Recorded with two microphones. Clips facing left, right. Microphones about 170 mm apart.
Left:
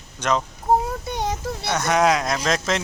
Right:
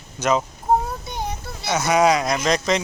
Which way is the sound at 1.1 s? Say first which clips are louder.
Left 4 dB; 80° left.